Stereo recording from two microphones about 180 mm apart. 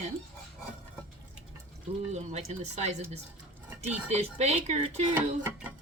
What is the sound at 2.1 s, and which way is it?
Speech, 40° right (ahead or behind).